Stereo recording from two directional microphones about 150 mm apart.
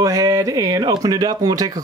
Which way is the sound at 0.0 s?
25° right (ahead or behind).